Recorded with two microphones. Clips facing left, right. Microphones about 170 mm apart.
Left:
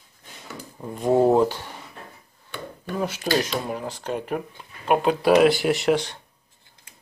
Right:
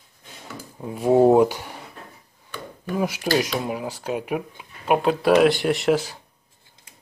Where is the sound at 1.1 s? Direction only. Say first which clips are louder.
Right 3 dB; 15° right (ahead or behind).